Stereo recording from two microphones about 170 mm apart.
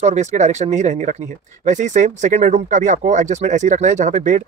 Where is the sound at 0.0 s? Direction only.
45° right (ahead or behind).